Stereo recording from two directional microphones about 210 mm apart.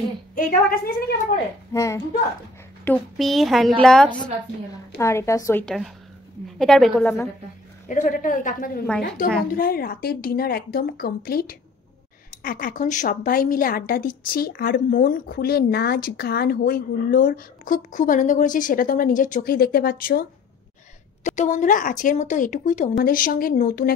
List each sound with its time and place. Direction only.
0.3 s a woman's voice: 45° left (ahead or behind)
1.7 s speech: 15° left (ahead or behind)
2.8 s speech: 5° left (ahead or behind)
4.9 s a woman's voice: 10° left (ahead or behind)
7.9 s a woman's voice: 40° left (ahead or behind)